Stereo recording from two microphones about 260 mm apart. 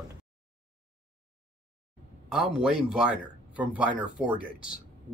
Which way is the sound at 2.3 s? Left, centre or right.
Centre.